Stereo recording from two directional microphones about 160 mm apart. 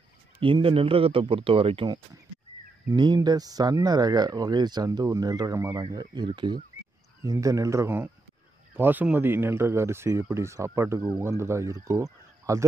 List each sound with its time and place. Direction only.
0.4 s speech: 35° right (ahead or behind)
2.9 s speech: 25° right (ahead or behind)